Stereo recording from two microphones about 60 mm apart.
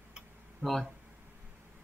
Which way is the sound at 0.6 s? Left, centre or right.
Right.